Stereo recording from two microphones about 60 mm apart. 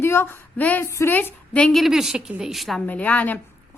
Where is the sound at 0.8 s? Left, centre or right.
Left.